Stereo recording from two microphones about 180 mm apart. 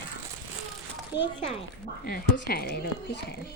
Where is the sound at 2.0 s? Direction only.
55° left (ahead or behind).